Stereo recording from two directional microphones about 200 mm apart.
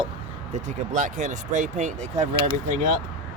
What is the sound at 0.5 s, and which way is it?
Speech, 40° right (ahead or behind).